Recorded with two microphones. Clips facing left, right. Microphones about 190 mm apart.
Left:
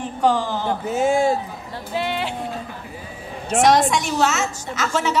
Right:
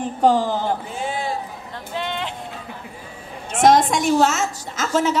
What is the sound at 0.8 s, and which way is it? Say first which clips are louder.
Speech: left 9 dB; 45° left (ahead or behind).